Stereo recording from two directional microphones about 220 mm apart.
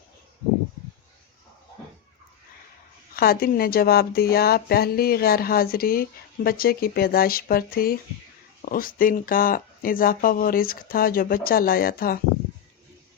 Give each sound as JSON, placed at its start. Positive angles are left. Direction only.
{"t": 3.2, "sound": "speech", "side_deg": 40}